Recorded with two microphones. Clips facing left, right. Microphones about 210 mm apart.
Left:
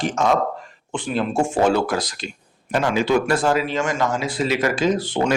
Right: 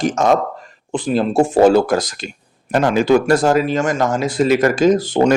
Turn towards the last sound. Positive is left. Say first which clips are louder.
# right 7 dB
turn(degrees=-45)  # may be behind; listen again after turning